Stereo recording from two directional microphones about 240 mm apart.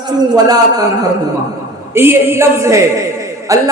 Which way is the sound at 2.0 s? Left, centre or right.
Centre.